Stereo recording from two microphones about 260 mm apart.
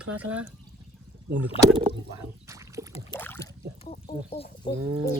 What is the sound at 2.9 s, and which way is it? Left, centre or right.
Rowboat, left.